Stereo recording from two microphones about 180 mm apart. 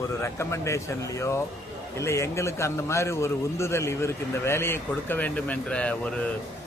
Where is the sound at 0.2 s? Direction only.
15° left (ahead or behind).